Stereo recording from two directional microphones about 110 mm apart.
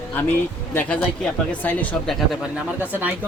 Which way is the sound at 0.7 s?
15° left (ahead or behind).